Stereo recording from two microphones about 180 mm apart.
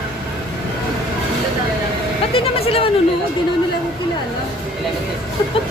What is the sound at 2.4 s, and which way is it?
Speech, 35° left (ahead or behind).